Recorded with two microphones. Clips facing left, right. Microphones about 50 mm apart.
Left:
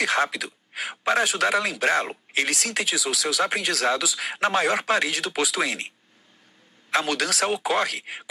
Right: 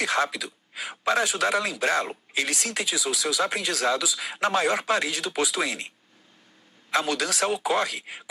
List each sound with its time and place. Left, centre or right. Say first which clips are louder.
0.3 s a man's voice: left 2 dB; left
4.4 s a man's voice: left 1 dB; left
6.9 s a man's voice: left 1 dB; left